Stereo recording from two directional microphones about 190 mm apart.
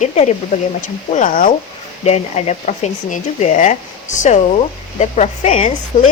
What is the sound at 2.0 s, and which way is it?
Speech, 35° left (ahead or behind).